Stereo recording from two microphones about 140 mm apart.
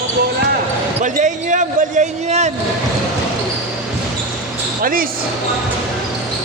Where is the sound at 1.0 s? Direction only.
65° right (ahead or behind).